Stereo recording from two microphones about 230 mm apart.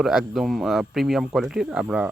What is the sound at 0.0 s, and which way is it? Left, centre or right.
Speech, centre.